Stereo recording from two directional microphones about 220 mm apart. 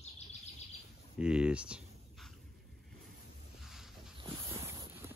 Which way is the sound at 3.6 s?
Centre (ahead or behind).